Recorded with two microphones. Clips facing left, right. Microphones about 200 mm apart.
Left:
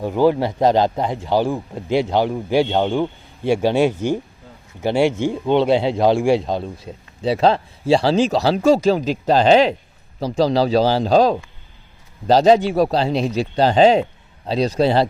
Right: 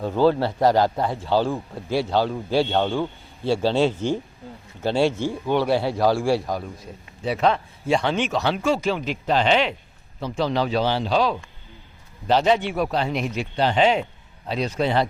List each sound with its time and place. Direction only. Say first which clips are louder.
0.0 s a man's voice: left 3 dB; 15° left (ahead or behind); by 15.0 s 35° left (ahead or behind)